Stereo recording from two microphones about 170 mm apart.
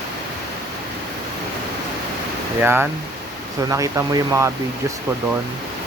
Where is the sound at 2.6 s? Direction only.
15° right (ahead or behind).